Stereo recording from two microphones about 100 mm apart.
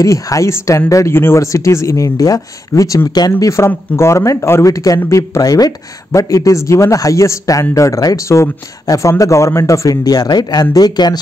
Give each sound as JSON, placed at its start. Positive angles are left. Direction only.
{"t": 0.0, "sound": "speech", "side_deg": 35}